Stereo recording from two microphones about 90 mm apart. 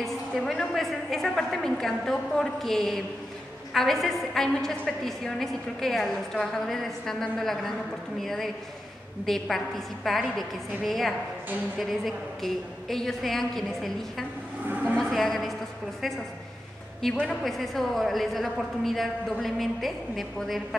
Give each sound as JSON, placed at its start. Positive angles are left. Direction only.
{"t": 0.0, "sound": "a woman's voice", "side_deg": 5}
{"t": 14.7, "sound": "a sound", "side_deg": -20}
{"t": 15.0, "sound": "a woman's voice", "side_deg": 5}
{"t": 17.0, "sound": "a woman's voice", "side_deg": 5}